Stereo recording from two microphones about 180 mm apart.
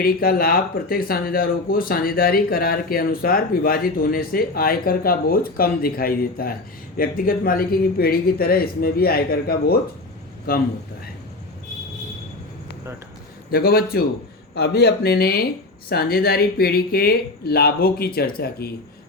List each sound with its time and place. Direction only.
0.0 s speech: 55° left (ahead or behind)
13.5 s speech: 60° left (ahead or behind)